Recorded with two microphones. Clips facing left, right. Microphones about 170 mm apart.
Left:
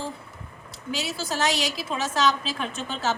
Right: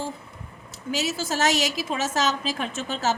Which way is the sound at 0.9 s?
45° right (ahead or behind).